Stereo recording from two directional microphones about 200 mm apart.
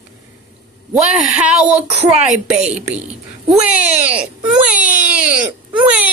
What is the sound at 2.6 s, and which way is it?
Speech, 35° right (ahead or behind).